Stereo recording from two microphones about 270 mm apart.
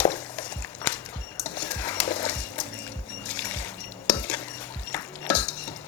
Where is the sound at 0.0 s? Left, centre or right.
Centre.